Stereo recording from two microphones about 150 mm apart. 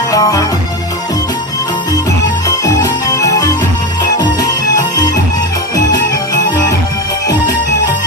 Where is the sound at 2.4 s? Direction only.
25° left (ahead or behind).